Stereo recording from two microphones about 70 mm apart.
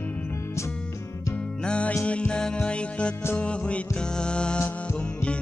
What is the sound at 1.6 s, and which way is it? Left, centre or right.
Music, centre.